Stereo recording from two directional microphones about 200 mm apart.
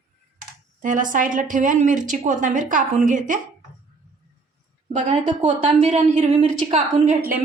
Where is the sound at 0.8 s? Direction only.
40° right (ahead or behind).